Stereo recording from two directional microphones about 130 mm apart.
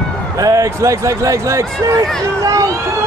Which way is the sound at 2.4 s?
30° right (ahead or behind).